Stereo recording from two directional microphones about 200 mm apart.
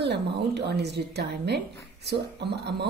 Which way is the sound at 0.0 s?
55° right (ahead or behind).